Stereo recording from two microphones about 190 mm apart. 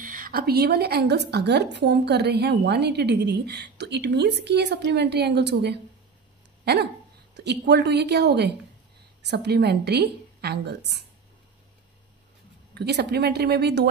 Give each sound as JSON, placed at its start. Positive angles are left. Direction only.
{"t": 0.0, "sound": "a woman's voice", "side_deg": -45}
{"t": 12.7, "sound": "a woman's voice", "side_deg": -60}